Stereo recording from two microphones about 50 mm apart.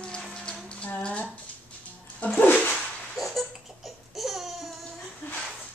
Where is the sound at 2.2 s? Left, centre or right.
Left.